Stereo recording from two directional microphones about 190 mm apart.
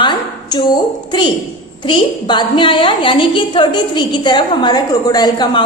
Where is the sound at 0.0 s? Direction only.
25° left (ahead or behind).